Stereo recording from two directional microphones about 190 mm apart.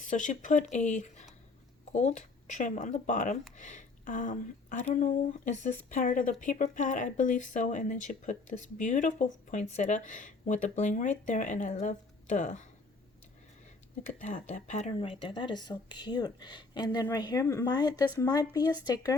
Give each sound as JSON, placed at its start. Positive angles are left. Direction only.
{"t": 0.0, "sound": "speech", "side_deg": 40}
{"t": 14.1, "sound": "speech", "side_deg": 40}